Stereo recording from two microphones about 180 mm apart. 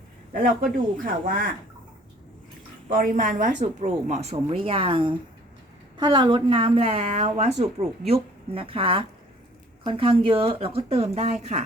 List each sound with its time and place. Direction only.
0.3 s speech: 50° right (ahead or behind)
2.9 s speech: 45° right (ahead or behind)